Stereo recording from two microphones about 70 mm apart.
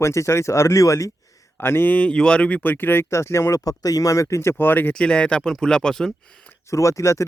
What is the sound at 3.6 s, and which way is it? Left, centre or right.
Speech, left.